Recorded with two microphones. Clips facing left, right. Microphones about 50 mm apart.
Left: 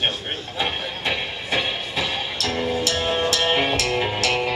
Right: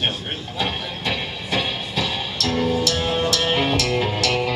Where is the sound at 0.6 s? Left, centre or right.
Centre.